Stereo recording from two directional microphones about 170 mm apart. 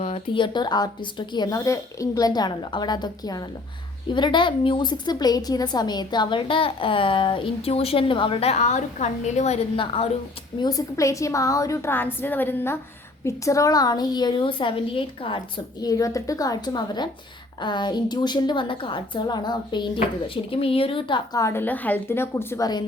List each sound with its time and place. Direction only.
0.0 s a woman's voice: 30° left (ahead or behind)
9.7 s a woman's voice: 30° left (ahead or behind)
10.6 s a woman's voice: 20° left (ahead or behind)
21.4 s a woman's voice: 10° left (ahead or behind)